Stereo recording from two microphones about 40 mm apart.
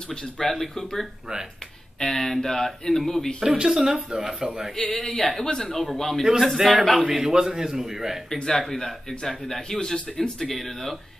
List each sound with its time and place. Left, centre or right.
0.4 s a man's voice: centre
3.4 s a man's voice: centre
4.7 s a man's voice: centre
6.4 s a man's voice: centre
8.5 s a man's voice: centre